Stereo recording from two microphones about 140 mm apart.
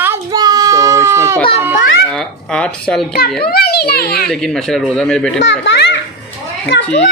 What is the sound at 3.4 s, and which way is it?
Children playing, 90° left.